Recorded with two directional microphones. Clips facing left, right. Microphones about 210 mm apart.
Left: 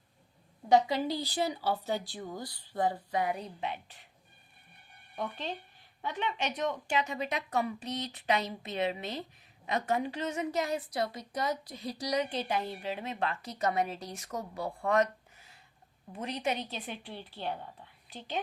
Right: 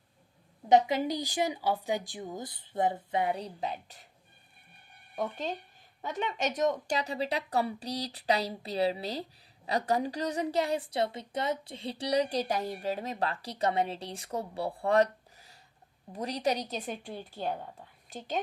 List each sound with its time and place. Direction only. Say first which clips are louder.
0.7 s speech: right 2 dB; 20° right (ahead or behind); by 4.0 s 40° right (ahead or behind)
5.1 s a woman's voice: right 3 dB; 45° right (ahead or behind)